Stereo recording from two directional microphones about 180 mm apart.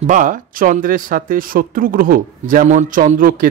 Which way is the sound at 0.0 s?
45° right (ahead or behind).